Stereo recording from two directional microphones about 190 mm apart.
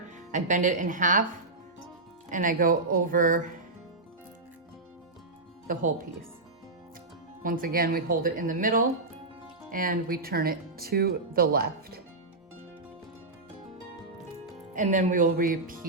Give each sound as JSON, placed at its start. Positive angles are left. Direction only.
{"t": 0.3, "sound": "speech", "side_deg": -40}
{"t": 2.3, "sound": "speech", "side_deg": -45}
{"t": 5.6, "sound": "speech", "side_deg": -45}
{"t": 7.4, "sound": "speech", "side_deg": -45}
{"t": 14.7, "sound": "speech", "side_deg": -40}